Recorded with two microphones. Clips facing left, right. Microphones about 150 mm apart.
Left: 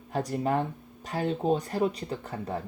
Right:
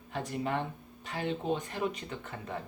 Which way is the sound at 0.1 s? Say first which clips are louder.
Left 6 dB; 40° left (ahead or behind).